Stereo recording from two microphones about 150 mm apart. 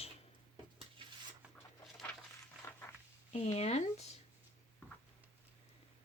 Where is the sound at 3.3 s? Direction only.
40° left (ahead or behind).